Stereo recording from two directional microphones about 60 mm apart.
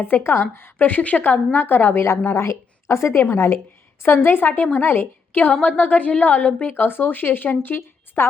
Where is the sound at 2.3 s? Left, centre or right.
Left.